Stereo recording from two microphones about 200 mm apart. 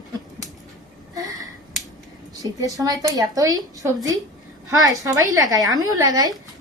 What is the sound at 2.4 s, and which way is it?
A woman's voice, 15° right (ahead or behind).